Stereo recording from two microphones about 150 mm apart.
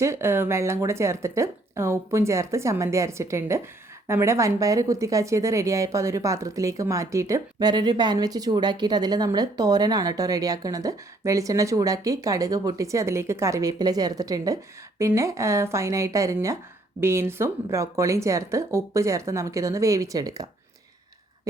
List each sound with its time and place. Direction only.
0.0 s a woman's voice: 15° right (ahead or behind)